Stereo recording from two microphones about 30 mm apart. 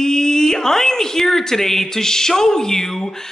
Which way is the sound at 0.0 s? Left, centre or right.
Centre.